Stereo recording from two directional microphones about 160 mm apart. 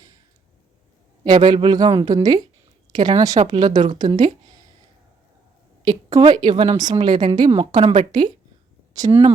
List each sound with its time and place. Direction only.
1.5 s a woman's voice: 25° right (ahead or behind)
5.8 s a woman's voice: 25° right (ahead or behind)
7.6 s a woman's voice: 40° right (ahead or behind); by 9.1 s 20° right (ahead or behind)